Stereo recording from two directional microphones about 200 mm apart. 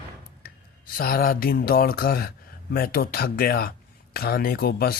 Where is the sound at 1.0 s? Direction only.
45° left (ahead or behind).